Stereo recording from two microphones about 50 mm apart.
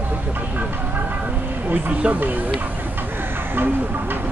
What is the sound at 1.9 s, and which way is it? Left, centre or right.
Speech, right.